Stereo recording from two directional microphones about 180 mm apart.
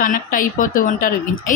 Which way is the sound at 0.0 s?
50° left (ahead or behind).